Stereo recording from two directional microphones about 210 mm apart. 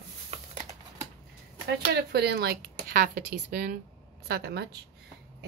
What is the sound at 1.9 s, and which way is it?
A woman's voice, 50° right (ahead or behind).